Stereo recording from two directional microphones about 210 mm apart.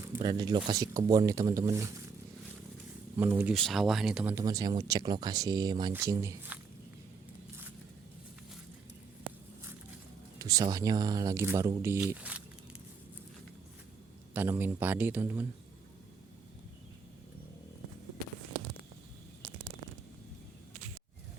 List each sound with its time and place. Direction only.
0.2 s speech: 20° right (ahead or behind)
3.2 s speech: 10° right (ahead or behind)
10.3 s speech: 15° right (ahead or behind)
14.3 s speech: 10° right (ahead or behind)